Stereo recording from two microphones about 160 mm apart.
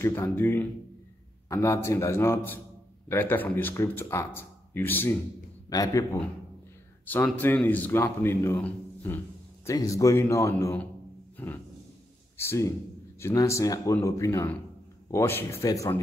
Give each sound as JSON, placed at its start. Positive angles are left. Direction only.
{"t": 0.0, "sound": "speech", "side_deg": 15}
{"t": 7.1, "sound": "speech", "side_deg": 10}
{"t": 11.3, "sound": "music", "side_deg": 10}
{"t": 12.4, "sound": "speech", "side_deg": 15}